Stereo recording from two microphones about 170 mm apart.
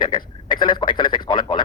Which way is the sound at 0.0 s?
25° left (ahead or behind).